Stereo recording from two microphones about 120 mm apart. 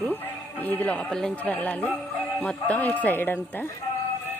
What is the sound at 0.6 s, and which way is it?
Speech, 15° left (ahead or behind).